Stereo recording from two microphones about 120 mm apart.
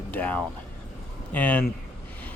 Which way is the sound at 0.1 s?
10° left (ahead or behind).